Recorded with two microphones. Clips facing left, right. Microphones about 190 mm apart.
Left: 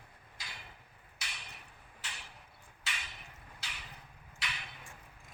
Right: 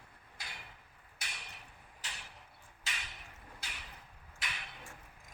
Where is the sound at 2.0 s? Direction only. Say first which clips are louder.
Even; 40° right (ahead or behind).